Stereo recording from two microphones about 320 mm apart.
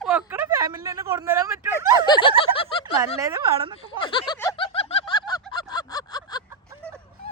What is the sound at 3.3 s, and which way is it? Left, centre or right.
Speech, centre.